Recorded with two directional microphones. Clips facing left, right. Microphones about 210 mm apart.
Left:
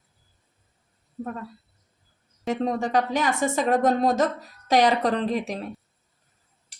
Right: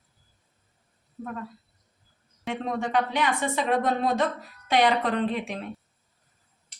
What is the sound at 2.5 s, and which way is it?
Speech, 40° left (ahead or behind).